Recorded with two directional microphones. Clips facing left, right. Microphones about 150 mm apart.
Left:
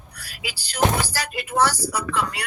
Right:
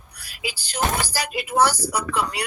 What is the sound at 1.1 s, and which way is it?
Speech, 10° right (ahead or behind).